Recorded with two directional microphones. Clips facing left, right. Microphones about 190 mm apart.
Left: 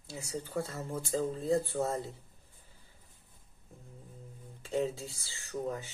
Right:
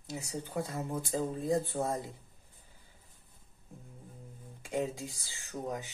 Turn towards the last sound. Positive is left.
turn(degrees=-15)  # may be behind; listen again after turning